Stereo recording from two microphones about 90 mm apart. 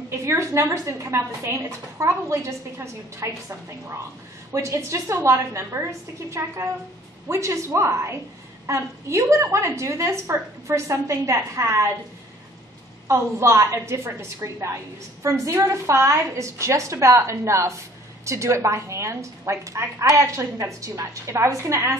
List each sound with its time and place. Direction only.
0.1 s a woman's voice: 30° right (ahead or behind)
13.1 s a woman's voice: 30° right (ahead or behind)